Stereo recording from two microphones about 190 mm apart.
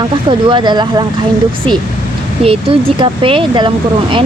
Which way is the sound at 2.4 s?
30° right (ahead or behind).